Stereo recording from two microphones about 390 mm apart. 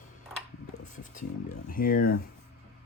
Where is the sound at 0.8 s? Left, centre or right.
Centre.